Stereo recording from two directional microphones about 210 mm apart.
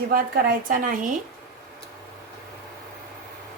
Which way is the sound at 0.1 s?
40° right (ahead or behind).